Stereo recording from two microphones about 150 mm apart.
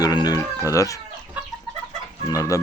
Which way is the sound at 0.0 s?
25° left (ahead or behind).